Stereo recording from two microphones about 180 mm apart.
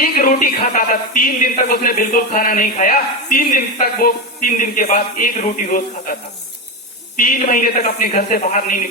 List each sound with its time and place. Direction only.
0.0 s a man's voice: 50° left (ahead or behind)
7.2 s a man's voice: 50° left (ahead or behind)